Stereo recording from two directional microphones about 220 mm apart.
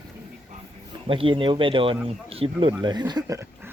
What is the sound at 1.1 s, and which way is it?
Speech, 25° right (ahead or behind).